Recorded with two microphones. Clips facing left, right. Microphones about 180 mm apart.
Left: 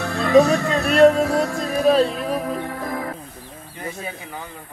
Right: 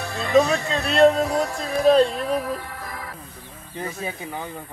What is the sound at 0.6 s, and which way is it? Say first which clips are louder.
Music: left 3 dB; 55° left (ahead or behind).